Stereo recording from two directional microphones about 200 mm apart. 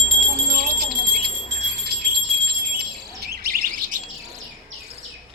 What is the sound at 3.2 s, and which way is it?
Bird, 50° right (ahead or behind).